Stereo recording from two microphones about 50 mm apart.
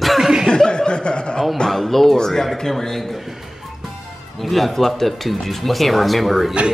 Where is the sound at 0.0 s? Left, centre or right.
Centre.